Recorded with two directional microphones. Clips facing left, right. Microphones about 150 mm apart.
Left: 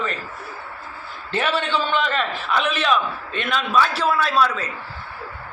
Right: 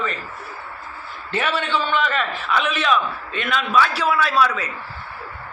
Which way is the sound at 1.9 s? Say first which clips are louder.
Even; 30° left (ahead or behind).